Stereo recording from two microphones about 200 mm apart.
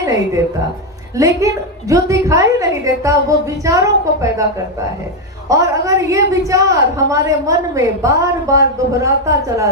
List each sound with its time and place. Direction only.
0.0 s a woman's voice: 15° right (ahead or behind)
1.9 s a woman's voice: 15° right (ahead or behind)
5.5 s a woman's voice: 15° right (ahead or behind)